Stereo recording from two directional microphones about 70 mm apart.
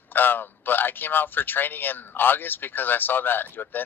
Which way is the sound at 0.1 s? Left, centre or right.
Left.